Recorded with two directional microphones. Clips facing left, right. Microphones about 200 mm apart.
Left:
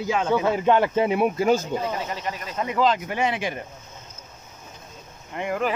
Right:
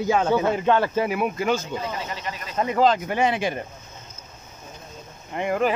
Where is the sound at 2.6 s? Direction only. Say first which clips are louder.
Right 3 dB; 45° right (ahead or behind).